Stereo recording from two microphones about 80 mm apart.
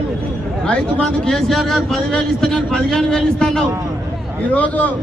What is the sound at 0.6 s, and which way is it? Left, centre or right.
Speech, centre.